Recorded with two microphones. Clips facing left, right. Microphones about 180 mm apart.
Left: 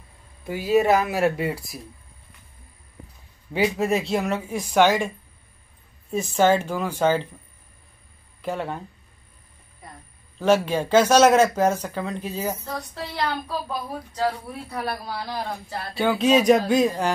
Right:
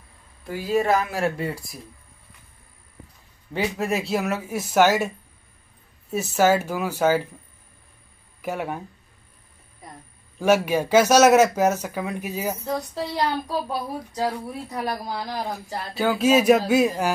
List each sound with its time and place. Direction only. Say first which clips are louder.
0.8 s speech: left 3 dB; 5° left (ahead or behind)
3.5 s speech: left 3 dB; centre (ahead or behind)
6.3 s speech: even; 5° right (ahead or behind)
8.4 s speech: even; 10° right (ahead or behind)
10.4 s speech: even; 10° right (ahead or behind)